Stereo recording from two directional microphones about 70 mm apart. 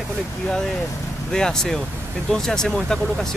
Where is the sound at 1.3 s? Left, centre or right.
Centre.